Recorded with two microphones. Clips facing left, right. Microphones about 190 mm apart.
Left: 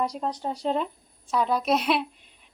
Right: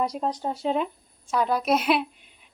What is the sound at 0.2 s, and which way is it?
Speech, 20° right (ahead or behind).